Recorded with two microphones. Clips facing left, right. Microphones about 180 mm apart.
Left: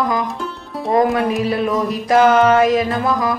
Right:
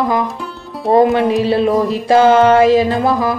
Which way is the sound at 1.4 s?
30° right (ahead or behind).